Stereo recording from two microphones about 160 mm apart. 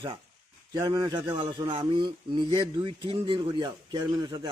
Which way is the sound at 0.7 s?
25° right (ahead or behind).